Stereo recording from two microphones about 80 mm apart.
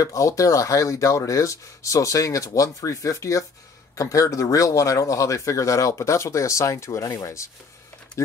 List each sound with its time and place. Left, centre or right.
0.0 s speech: left